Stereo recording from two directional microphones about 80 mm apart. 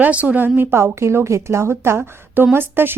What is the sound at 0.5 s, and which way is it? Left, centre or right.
A woman's voice, right.